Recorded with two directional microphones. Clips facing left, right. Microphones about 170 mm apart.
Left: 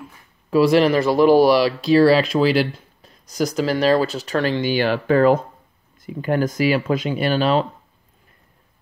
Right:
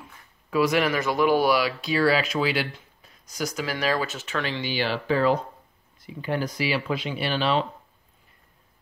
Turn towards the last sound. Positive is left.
turn(degrees=45)  # may be behind; listen again after turning